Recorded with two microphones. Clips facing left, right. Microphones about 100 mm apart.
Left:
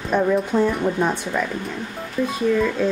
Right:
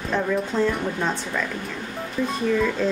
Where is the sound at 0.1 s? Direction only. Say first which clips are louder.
Left 5 dB; 15° left (ahead or behind).